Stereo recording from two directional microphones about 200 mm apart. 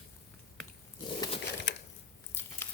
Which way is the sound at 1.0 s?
25° left (ahead or behind).